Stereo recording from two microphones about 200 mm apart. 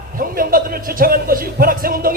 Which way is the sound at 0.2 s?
45° right (ahead or behind).